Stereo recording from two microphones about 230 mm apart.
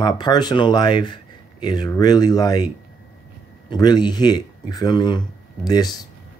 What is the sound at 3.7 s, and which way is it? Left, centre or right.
Speech, centre.